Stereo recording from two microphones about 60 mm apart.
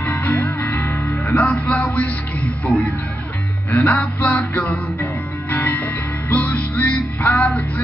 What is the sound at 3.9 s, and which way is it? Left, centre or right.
Music, left.